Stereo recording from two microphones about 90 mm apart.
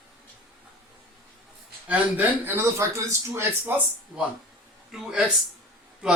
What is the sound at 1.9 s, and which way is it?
Speech, 20° right (ahead or behind).